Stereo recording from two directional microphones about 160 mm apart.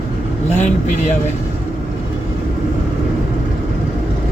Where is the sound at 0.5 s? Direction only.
50° left (ahead or behind).